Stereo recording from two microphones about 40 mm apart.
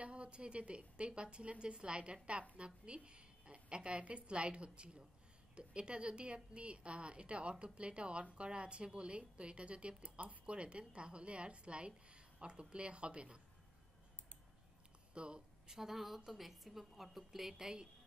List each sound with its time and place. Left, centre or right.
0.0 s a woman's voice: right
15.1 s speech: right
15.7 s a woman's voice: centre